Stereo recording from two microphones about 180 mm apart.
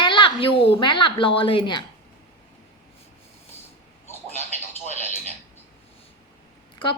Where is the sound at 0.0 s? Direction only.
25° left (ahead or behind).